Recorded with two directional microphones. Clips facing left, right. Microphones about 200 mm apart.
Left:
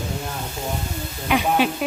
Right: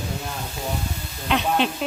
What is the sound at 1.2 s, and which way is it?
Speech, 10° left (ahead or behind).